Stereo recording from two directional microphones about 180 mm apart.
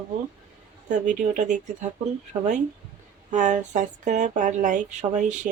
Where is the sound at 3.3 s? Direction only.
45° right (ahead or behind).